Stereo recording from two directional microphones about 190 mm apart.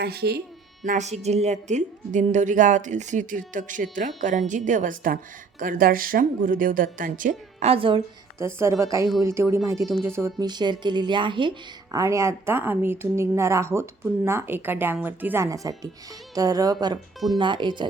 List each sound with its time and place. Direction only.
0.0 s speech: 55° right (ahead or behind)
0.9 s a woman's voice: 35° right (ahead or behind)
7.7 s speech: 30° right (ahead or behind)
8.4 s speech: 15° right (ahead or behind)